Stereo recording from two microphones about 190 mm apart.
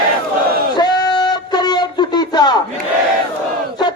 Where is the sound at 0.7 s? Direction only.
20° left (ahead or behind).